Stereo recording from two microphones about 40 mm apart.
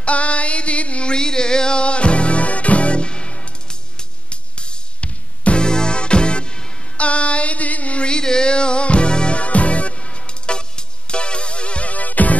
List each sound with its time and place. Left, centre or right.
0.0 s music: left